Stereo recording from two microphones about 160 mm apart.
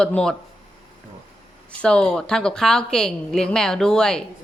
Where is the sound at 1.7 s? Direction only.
5° left (ahead or behind).